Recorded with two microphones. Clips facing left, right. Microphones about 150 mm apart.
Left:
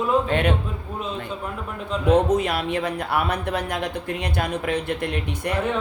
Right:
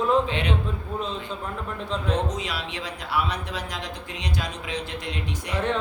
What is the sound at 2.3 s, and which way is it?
Speech, 55° left (ahead or behind).